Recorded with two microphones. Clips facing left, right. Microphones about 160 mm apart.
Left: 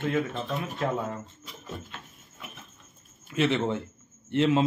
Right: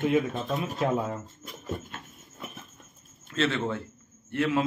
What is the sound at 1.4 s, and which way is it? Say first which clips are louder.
Dog: right 4 dB; 45° right (ahead or behind).